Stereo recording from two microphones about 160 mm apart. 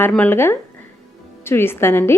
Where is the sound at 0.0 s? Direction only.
10° left (ahead or behind).